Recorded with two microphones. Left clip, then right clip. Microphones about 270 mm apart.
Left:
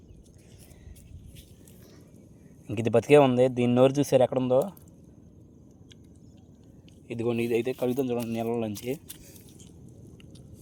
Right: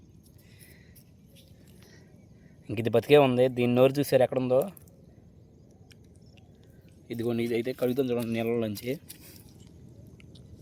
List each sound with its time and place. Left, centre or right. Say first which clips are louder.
2.6 s speech: left 1 dB; centre
7.4 s speech: left 1 dB; centre